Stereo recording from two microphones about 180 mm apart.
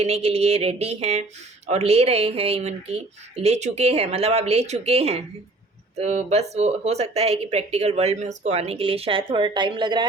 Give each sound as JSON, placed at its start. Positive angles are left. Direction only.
{"t": 0.0, "sound": "speech", "side_deg": -35}